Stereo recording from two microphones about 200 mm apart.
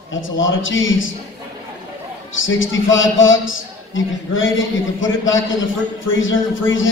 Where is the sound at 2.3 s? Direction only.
75° left (ahead or behind).